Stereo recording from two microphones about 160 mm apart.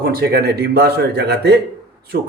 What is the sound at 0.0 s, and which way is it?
Speech, 75° right (ahead or behind).